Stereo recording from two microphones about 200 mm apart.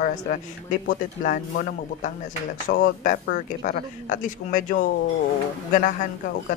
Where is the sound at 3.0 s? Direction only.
40° left (ahead or behind).